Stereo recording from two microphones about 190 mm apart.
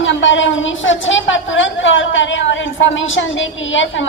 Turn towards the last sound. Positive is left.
turn(degrees=80)